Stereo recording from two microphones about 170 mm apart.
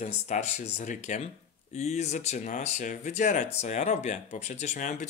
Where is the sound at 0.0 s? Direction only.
40° left (ahead or behind).